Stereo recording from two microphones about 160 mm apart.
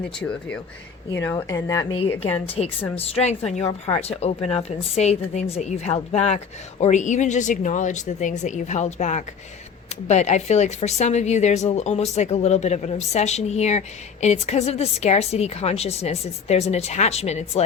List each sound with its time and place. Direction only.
0.2 s a woman's voice: 10° left (ahead or behind)
2.6 s a woman's voice: 40° left (ahead or behind)